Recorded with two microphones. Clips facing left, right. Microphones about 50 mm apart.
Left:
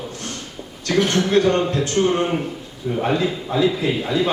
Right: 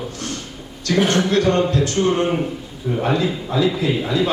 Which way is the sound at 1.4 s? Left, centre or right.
Centre.